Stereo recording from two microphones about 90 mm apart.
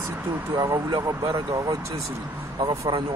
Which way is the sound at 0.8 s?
55° right (ahead or behind).